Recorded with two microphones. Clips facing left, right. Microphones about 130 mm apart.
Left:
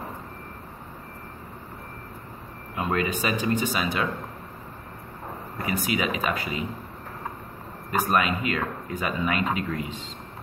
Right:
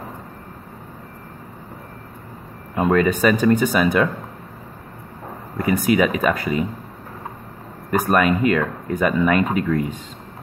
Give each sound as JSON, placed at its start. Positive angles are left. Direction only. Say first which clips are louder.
{"t": 2.7, "sound": "speech", "louder": "right 9 dB", "side_deg": -45}
{"t": 5.6, "sound": "speech", "louder": "right 10 dB", "side_deg": -45}
{"t": 7.9, "sound": "speech", "louder": "right 6 dB", "side_deg": -50}